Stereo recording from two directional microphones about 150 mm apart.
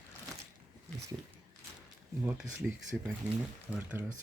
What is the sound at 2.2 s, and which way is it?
Speech, 5° right (ahead or behind).